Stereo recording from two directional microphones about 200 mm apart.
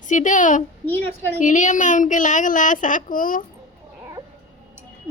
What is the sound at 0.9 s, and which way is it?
Speech, 10° left (ahead or behind).